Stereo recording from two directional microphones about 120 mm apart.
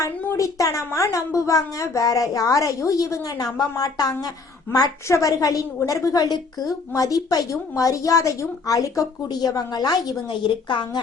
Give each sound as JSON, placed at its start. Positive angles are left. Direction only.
{"t": 0.0, "sound": "a woman's voice", "side_deg": 25}